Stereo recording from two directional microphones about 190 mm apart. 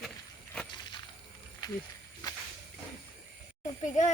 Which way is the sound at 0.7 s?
25° left (ahead or behind).